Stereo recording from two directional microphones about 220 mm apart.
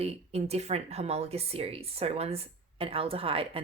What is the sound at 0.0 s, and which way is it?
Speech, 30° right (ahead or behind).